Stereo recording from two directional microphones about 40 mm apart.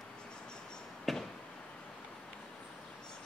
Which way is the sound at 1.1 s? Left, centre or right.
Centre.